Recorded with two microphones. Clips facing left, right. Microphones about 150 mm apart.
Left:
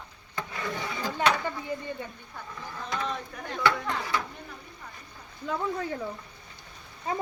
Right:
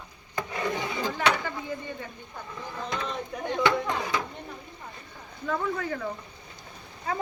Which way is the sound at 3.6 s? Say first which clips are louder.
Right 1 dB; 20° right (ahead or behind).